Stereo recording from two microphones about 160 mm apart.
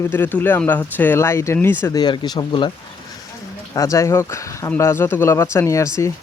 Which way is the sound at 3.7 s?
20° left (ahead or behind).